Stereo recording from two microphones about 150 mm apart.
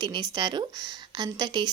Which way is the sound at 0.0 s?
30° right (ahead or behind).